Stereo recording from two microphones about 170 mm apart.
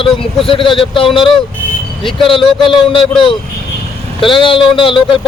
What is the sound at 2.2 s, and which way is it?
Speech, 30° left (ahead or behind).